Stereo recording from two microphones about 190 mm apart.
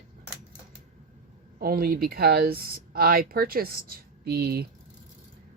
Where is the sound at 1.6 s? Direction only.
50° right (ahead or behind).